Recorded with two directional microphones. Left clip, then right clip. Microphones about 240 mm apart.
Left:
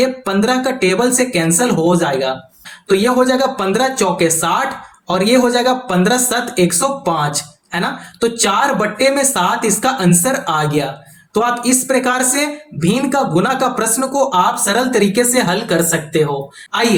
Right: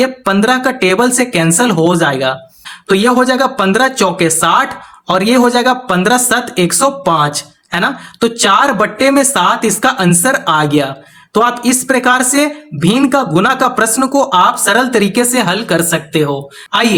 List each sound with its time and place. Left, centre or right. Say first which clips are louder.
0.0 s speech: right 3 dB; right